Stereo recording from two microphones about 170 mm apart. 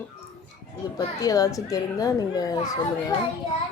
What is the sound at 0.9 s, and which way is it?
A child's voice, 20° left (ahead or behind).